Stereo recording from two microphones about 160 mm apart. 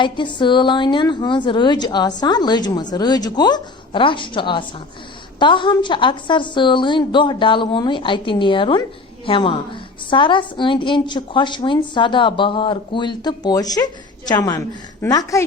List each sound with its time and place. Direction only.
0.0 s a woman's voice: 30° left (ahead or behind)